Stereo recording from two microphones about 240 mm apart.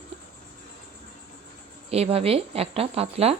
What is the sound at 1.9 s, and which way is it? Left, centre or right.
A woman's voice, right.